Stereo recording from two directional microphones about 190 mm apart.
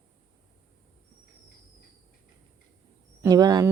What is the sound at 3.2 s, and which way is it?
Speech, 20° right (ahead or behind).